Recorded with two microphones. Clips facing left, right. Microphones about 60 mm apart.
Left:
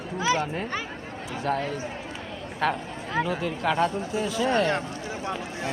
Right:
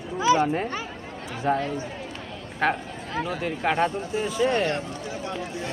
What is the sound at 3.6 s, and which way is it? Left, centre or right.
A man's voice, centre.